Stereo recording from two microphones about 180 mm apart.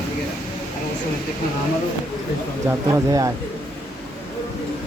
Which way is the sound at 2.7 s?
15° right (ahead or behind).